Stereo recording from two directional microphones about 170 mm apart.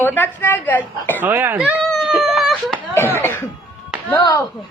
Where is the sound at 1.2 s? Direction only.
10° right (ahead or behind).